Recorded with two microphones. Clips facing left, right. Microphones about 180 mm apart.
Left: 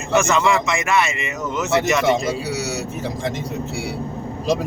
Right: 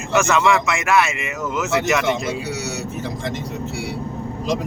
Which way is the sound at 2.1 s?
35° left (ahead or behind).